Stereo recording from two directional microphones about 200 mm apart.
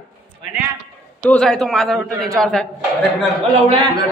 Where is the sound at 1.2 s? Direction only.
5° left (ahead or behind).